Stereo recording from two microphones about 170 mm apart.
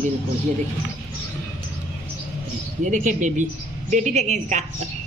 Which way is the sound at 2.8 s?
45° right (ahead or behind).